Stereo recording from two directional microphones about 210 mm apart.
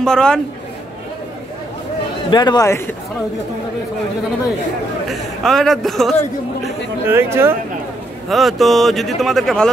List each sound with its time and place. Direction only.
0.0 s speech: 5° left (ahead or behind)
2.3 s speech: 20° left (ahead or behind)
5.0 s speech: centre (ahead or behind)
7.1 s speech: 10° right (ahead or behind)
8.3 s speech: centre (ahead or behind)